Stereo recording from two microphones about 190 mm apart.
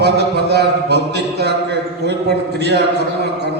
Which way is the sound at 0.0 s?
60° right (ahead or behind).